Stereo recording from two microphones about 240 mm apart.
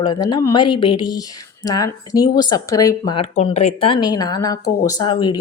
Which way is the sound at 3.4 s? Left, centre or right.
Left.